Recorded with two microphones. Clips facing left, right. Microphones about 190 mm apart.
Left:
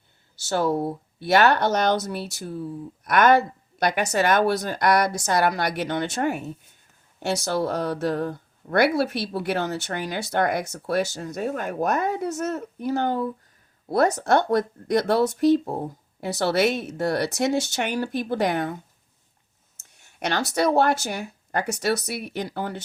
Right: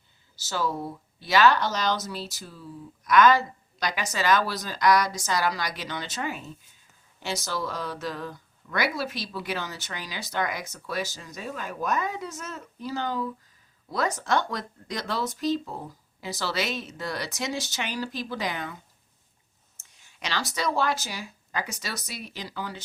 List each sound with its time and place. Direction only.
0.4 s speech: 60° left (ahead or behind)